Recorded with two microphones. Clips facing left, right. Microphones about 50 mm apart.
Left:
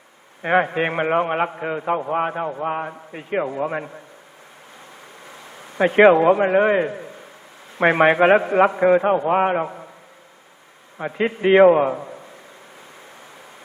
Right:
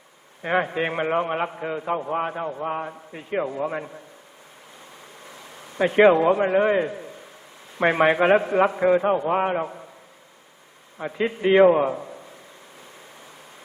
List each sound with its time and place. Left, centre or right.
0.4 s a man's voice: left
5.2 s a sound: centre
7.8 s a man's voice: left
10.9 s a man's voice: left